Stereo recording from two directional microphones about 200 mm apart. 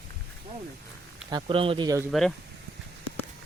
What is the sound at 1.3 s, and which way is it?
Speech, 25° right (ahead or behind).